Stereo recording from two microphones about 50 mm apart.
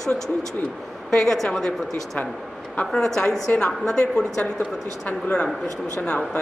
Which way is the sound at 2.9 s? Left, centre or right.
Centre.